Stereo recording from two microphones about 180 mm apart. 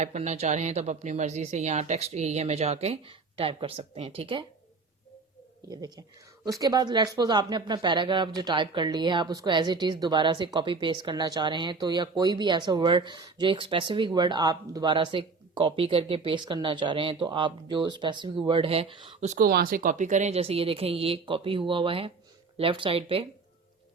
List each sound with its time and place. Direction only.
0.0 s speech: 40° right (ahead or behind)
5.6 s speech: 20° right (ahead or behind)
19.4 s speech: 55° right (ahead or behind); by 23.2 s 30° right (ahead or behind)